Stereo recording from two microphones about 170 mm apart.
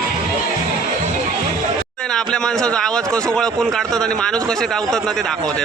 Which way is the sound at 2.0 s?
5° left (ahead or behind).